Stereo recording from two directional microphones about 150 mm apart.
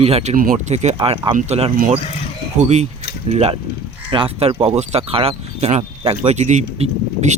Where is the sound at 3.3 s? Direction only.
45° right (ahead or behind).